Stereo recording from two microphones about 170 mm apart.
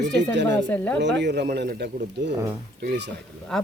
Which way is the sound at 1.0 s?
90° right.